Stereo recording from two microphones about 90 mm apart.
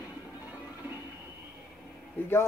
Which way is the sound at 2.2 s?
20° left (ahead or behind).